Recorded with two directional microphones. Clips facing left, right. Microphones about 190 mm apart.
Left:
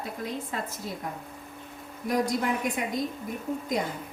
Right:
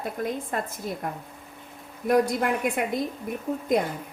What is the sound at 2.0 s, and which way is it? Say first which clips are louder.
Speech: right 4 dB; 60° right (ahead or behind).